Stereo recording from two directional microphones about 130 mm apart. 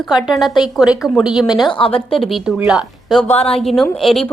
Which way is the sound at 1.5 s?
30° left (ahead or behind).